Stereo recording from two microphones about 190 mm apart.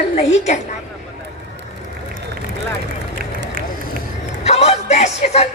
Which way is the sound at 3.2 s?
50° right (ahead or behind).